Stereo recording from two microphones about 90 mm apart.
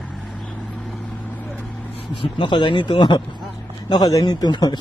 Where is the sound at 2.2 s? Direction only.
65° left (ahead or behind).